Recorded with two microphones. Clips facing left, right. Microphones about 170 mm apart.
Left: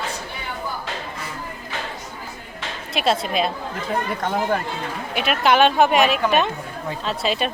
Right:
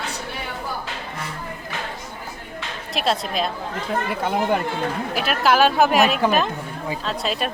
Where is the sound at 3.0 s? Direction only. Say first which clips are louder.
Left 2 dB; centre (ahead or behind).